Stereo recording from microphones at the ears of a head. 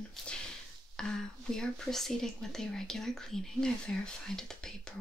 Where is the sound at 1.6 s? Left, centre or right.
Centre.